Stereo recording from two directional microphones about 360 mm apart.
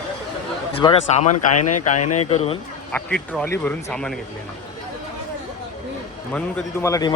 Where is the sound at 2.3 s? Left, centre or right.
Centre.